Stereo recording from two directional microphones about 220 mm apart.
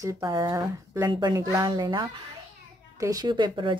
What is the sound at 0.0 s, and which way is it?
Speech, 15° right (ahead or behind).